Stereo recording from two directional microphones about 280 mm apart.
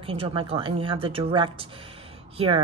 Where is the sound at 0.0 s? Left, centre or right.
Centre.